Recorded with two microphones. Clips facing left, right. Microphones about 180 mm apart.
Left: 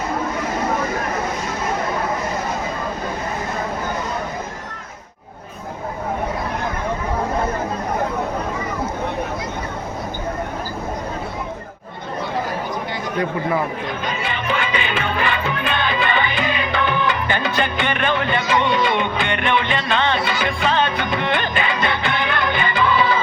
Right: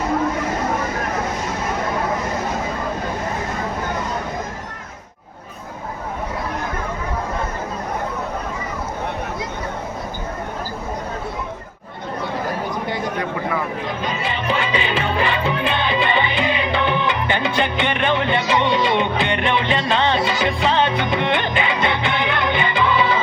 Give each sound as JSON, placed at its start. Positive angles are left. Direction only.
{"t": 14.0, "sound": "music", "side_deg": -30}